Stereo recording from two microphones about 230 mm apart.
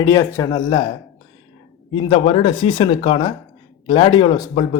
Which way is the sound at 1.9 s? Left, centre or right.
Left.